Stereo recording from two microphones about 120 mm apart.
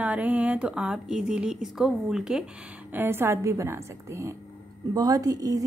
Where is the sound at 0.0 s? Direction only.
10° right (ahead or behind).